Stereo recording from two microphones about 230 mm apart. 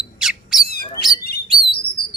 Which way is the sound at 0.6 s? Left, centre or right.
Left.